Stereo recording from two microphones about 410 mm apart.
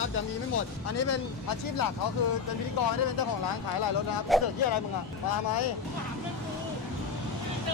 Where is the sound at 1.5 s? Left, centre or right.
Left.